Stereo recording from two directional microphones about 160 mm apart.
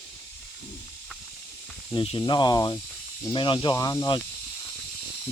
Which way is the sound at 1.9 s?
30° left (ahead or behind).